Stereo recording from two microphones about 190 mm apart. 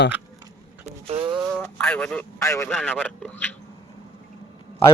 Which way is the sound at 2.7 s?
5° left (ahead or behind).